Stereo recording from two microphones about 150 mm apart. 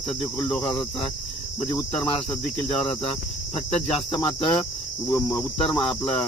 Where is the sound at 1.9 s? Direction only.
5° left (ahead or behind).